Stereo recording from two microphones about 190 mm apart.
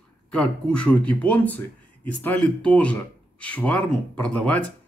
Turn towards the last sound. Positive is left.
turn(degrees=5)  # may be behind; listen again after turning